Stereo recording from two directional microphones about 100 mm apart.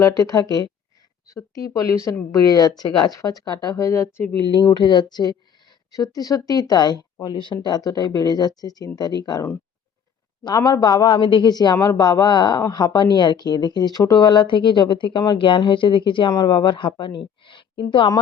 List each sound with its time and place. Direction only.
0.0 s speech: 35° left (ahead or behind)
4.5 s speech: 50° left (ahead or behind)
10.4 s speech: 40° left (ahead or behind)